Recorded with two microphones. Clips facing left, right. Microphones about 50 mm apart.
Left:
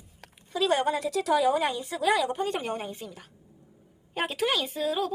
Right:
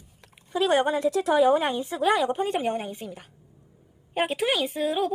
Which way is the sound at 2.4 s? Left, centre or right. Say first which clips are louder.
Right 4 dB; centre.